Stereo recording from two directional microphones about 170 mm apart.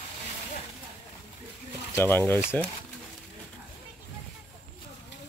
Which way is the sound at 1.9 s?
10° left (ahead or behind).